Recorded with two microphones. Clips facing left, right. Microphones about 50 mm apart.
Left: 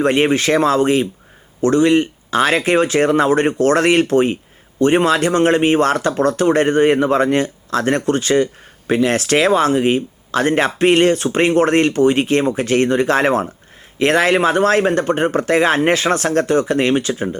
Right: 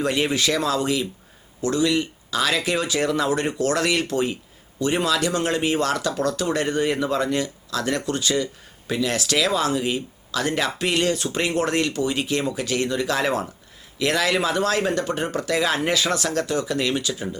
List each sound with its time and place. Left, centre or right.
0.0 s speech: left